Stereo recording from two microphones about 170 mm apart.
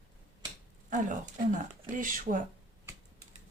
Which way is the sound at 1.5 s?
50° right (ahead or behind).